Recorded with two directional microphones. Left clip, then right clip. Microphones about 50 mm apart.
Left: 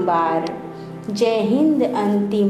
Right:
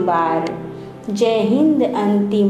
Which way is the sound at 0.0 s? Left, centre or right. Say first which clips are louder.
Right 1 dB; left.